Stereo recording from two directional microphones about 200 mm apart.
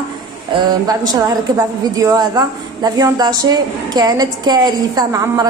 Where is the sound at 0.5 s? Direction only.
20° right (ahead or behind).